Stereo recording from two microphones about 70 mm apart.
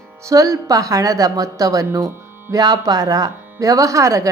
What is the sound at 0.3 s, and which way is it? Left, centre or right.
Speech, right.